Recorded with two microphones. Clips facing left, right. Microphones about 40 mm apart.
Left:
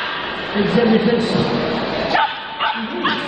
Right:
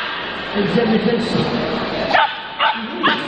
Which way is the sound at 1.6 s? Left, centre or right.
Centre.